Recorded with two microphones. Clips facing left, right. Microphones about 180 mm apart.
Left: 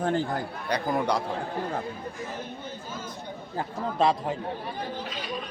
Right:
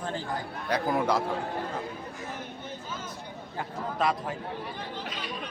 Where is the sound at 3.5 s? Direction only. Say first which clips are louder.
Left 4 dB; 25° left (ahead or behind).